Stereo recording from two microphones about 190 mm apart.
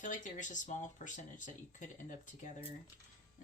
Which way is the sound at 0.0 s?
40° left (ahead or behind).